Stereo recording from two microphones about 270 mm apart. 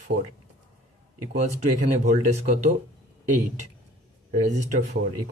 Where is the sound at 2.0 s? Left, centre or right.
Right.